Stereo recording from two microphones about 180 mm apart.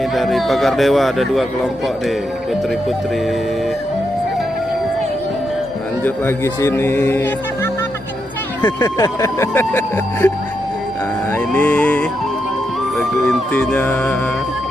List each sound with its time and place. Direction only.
0.2 s speech: centre (ahead or behind)
6.0 s speech: 10° left (ahead or behind)
11.3 s speech: 10° left (ahead or behind)